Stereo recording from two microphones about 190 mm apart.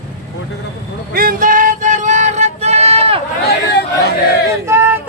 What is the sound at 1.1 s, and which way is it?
Music, 50° right (ahead or behind).